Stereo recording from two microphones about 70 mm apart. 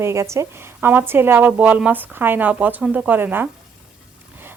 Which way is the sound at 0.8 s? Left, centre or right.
Right.